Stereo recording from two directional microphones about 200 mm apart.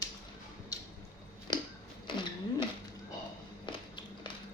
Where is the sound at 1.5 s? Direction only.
20° left (ahead or behind).